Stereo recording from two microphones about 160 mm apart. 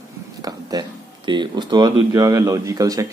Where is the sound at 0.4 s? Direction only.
25° right (ahead or behind).